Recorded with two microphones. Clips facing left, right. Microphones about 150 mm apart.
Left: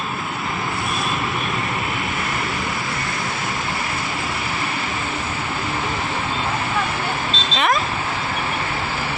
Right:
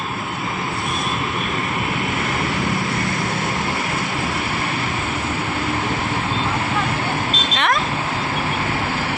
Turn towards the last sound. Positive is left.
turn(degrees=0)  # may be behind; listen again after turning